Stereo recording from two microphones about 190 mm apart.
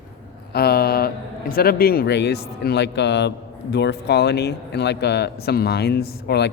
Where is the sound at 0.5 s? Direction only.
55° left (ahead or behind).